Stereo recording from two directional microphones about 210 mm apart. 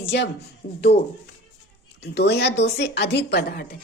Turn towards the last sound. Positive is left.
turn(degrees=50)  # may be behind; listen again after turning